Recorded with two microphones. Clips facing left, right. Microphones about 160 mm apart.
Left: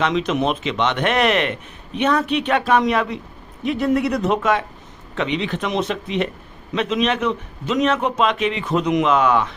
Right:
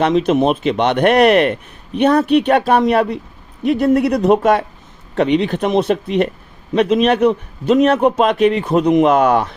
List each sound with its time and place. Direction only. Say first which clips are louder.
0.3 s a man's voice: right 6 dB; 50° right (ahead or behind)
0.9 s a man's voice: right 9 dB; 40° right (ahead or behind)